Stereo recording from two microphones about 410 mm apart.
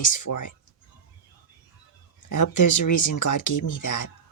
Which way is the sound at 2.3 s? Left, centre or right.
Left.